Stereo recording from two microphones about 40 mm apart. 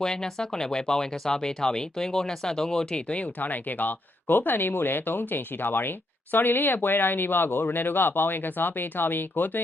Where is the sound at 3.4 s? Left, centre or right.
Left.